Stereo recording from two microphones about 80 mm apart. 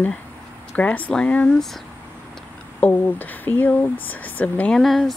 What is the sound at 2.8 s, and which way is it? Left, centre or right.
Speech, left.